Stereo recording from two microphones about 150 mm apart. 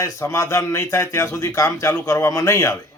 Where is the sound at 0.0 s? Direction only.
20° left (ahead or behind).